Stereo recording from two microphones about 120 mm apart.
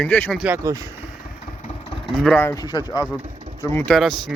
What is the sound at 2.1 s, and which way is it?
Speech, centre (ahead or behind).